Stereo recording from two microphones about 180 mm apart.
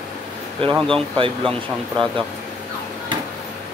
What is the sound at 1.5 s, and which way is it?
Speech, 30° right (ahead or behind).